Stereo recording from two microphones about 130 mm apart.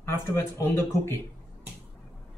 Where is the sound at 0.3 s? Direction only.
20° left (ahead or behind).